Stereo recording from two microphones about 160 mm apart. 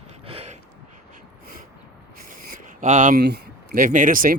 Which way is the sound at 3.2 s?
75° right (ahead or behind).